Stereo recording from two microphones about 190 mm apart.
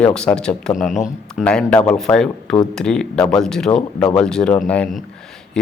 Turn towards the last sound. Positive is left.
turn(degrees=5)  # may be behind; listen again after turning